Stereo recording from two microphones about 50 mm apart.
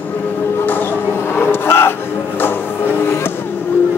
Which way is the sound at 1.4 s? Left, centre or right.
Left.